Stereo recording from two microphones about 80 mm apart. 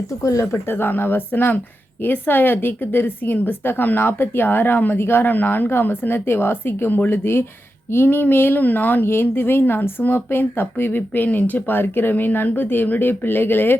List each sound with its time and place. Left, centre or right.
0.2 s speech: left
0.7 s a woman's voice: left